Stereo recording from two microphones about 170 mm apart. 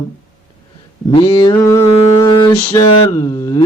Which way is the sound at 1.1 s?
30° left (ahead or behind).